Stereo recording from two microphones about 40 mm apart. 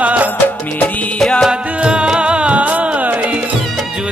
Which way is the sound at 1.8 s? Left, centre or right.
Right.